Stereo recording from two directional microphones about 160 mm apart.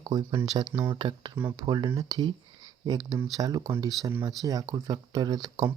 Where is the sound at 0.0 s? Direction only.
25° right (ahead or behind).